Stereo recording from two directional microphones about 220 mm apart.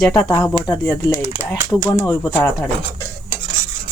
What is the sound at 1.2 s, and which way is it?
Speech, 10° right (ahead or behind).